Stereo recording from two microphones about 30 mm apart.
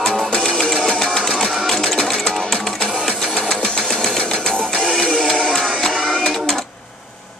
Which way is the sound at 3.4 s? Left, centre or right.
Left.